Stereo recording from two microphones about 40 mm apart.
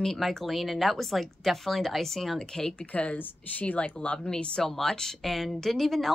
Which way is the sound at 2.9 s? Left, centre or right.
Left.